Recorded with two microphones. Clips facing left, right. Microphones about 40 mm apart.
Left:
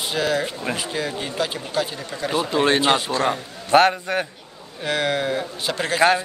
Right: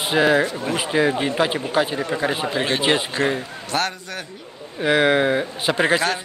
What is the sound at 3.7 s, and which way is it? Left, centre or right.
Speech, left.